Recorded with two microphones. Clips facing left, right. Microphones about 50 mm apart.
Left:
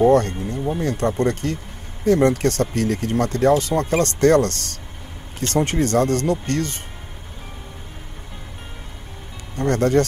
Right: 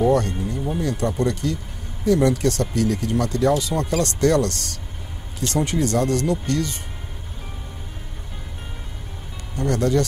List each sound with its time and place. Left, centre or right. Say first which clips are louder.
0.0 s speech: left 4 dB; left
9.6 s speech: left 3 dB; left